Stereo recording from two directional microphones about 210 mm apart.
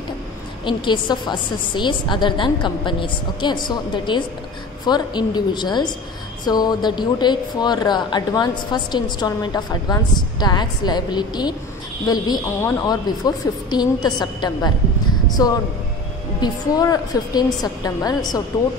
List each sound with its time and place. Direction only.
0.7 s a woman's voice: 20° left (ahead or behind)